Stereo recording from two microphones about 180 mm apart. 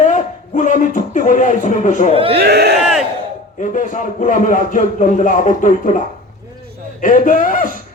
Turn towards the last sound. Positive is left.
turn(degrees=50)  # may be behind; listen again after turning